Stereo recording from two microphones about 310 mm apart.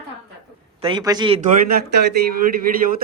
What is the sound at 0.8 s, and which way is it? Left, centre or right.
A man's voice, centre.